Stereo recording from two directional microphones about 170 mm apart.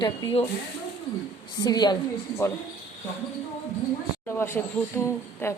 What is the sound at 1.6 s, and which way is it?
Speech, 25° left (ahead or behind).